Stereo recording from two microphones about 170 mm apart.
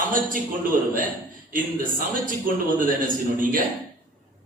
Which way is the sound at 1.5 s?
55° right (ahead or behind).